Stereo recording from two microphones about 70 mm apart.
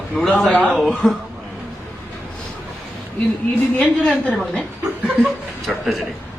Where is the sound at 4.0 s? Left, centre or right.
Centre.